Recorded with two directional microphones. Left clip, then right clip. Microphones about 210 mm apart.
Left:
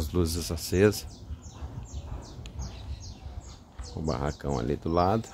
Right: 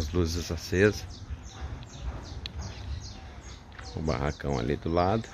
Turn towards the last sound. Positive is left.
turn(degrees=10)  # may be behind; listen again after turning